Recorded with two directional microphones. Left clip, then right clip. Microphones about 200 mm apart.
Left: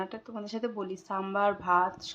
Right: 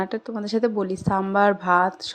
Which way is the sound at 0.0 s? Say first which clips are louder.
Right 10 dB; 30° right (ahead or behind).